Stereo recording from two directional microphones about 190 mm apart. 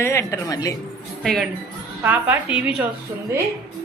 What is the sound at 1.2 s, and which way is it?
Speech, centre (ahead or behind).